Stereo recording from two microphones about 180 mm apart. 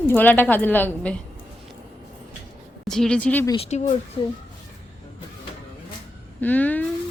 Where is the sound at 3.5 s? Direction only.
35° left (ahead or behind).